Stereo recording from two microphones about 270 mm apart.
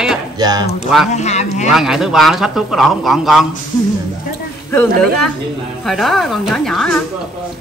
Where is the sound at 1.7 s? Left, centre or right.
Centre.